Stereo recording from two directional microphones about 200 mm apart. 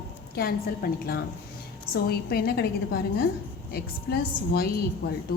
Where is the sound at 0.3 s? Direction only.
50° left (ahead or behind).